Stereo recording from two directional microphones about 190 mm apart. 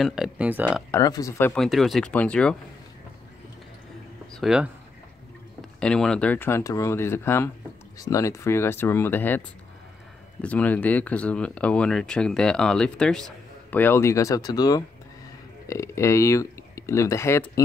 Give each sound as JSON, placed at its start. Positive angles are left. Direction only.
{"t": 0.0, "sound": "speech", "side_deg": 0}
{"t": 0.9, "sound": "speech", "side_deg": 20}
{"t": 1.5, "sound": "speech", "side_deg": 0}
{"t": 4.3, "sound": "speech", "side_deg": 0}
{"t": 10.4, "sound": "speech", "side_deg": 5}